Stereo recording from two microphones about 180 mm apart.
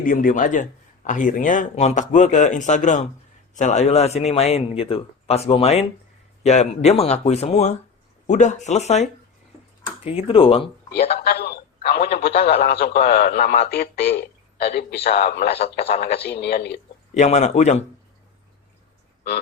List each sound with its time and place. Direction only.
0.0 s speech: 50° left (ahead or behind); by 10.7 s 30° left (ahead or behind)
11.2 s telephone: 60° left (ahead or behind)
12.2 s a man's voice: 60° left (ahead or behind)
17.2 s speech: 40° left (ahead or behind)